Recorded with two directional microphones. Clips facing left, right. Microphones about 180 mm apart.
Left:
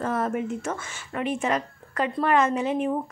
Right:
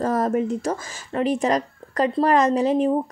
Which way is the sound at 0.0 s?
40° right (ahead or behind).